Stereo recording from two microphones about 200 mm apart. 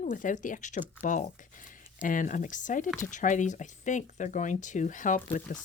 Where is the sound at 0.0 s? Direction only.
40° left (ahead or behind).